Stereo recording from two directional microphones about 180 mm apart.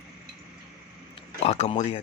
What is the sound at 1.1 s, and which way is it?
Speech, 35° left (ahead or behind).